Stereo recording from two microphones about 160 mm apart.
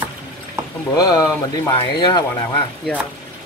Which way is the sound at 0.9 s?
20° left (ahead or behind).